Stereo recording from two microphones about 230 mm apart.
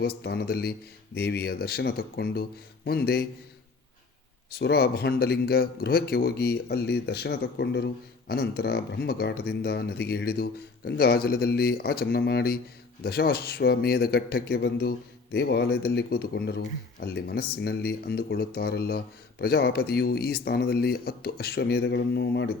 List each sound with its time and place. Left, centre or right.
0.2 s speech: left
4.6 s speech: left